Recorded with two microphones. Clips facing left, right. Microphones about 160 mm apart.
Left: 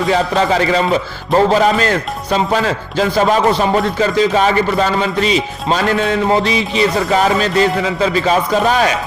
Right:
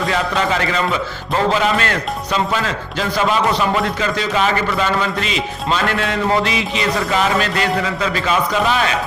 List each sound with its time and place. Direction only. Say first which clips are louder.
0.1 s a man's voice: left 6 dB; 35° left (ahead or behind)